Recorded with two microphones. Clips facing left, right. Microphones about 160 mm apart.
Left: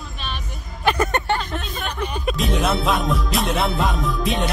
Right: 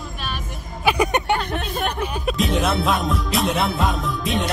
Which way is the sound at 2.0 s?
5° right (ahead or behind).